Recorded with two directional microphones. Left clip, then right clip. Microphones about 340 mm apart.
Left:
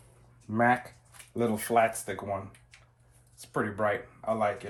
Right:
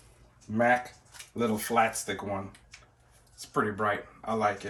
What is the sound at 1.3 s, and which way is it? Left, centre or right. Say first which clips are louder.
Speech: left 1 dB; centre.